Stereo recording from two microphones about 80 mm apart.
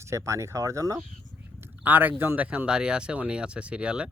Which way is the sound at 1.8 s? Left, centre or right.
Right.